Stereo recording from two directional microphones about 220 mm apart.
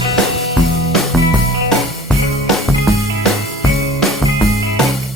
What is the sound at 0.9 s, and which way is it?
Music, centre (ahead or behind).